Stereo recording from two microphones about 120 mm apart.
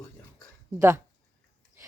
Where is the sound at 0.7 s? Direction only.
20° right (ahead or behind).